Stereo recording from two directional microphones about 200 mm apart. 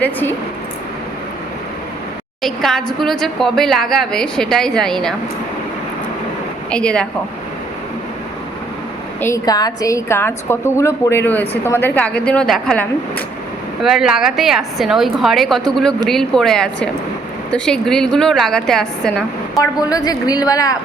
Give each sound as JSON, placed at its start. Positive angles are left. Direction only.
{"t": 0.0, "sound": "a woman's voice", "side_deg": 10}
{"t": 2.4, "sound": "a woman's voice", "side_deg": 0}
{"t": 6.7, "sound": "a woman's voice", "side_deg": 5}
{"t": 9.2, "sound": "a woman's voice", "side_deg": 15}
{"t": 19.5, "sound": "a woman's voice", "side_deg": 15}